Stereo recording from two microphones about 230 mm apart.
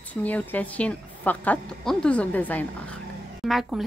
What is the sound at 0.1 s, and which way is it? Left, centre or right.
A woman's voice, centre.